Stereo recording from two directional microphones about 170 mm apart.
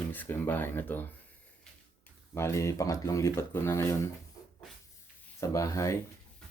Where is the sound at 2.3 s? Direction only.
15° left (ahead or behind).